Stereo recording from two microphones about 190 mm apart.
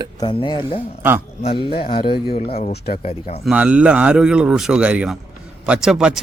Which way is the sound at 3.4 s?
5° right (ahead or behind).